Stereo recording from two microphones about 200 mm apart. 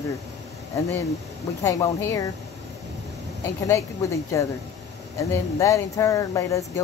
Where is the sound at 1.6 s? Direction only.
15° left (ahead or behind).